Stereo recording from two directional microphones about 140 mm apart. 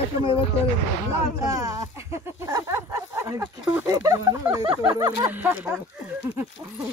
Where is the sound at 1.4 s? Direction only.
25° right (ahead or behind).